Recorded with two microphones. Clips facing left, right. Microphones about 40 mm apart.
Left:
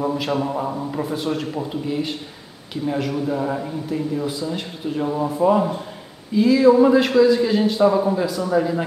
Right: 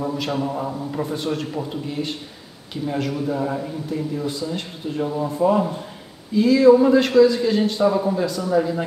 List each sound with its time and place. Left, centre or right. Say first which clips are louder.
0.0 s a man's voice: left 2 dB; centre
0.9 s a man's voice: right 1 dB; centre